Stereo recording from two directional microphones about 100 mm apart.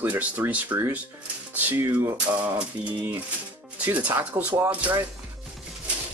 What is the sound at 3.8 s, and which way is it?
Speech, 20° right (ahead or behind).